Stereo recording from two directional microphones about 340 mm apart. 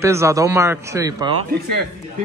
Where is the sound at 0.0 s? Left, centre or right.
Centre.